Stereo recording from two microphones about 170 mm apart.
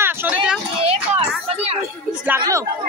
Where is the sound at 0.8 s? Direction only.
35° right (ahead or behind).